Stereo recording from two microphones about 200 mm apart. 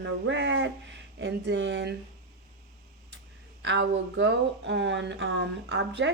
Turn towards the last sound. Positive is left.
turn(degrees=-65)  # may be behind; listen again after turning